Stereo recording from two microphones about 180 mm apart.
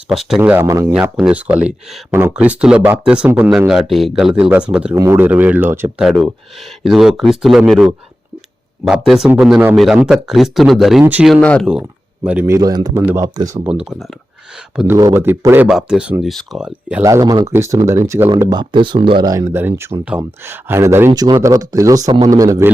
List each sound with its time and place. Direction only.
0.1 s speech: centre (ahead or behind)
6.1 s speech: centre (ahead or behind)
11.7 s speech: 5° right (ahead or behind)
13.7 s speech: 5° right (ahead or behind)
14.9 s speech: 15° right (ahead or behind)
17.0 s speech: 20° right (ahead or behind)